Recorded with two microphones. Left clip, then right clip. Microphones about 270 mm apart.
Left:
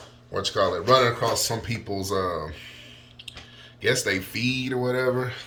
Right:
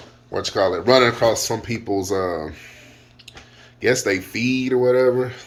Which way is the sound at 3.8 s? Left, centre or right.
Centre.